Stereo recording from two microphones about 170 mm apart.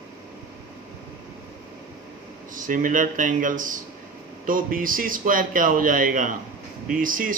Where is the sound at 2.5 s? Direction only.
50° right (ahead or behind).